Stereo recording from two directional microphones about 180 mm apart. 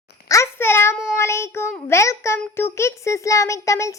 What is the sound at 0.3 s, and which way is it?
Child singing, 15° left (ahead or behind).